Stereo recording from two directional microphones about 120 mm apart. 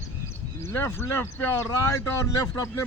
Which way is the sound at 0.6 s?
20° left (ahead or behind).